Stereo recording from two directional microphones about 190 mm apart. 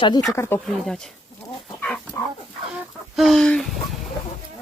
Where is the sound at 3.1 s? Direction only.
Centre (ahead or behind).